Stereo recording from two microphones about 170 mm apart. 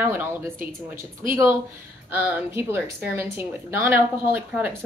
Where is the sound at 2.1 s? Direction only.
15° right (ahead or behind).